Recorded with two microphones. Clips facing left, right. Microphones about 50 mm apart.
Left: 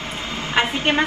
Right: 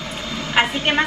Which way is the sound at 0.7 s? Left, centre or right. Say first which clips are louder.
Even; left.